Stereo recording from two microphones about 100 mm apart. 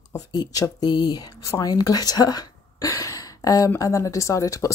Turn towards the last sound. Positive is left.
turn(degrees=35)  # may be behind; listen again after turning